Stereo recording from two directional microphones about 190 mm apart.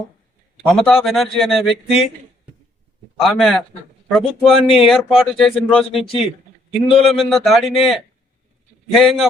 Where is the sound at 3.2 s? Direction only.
Centre (ahead or behind).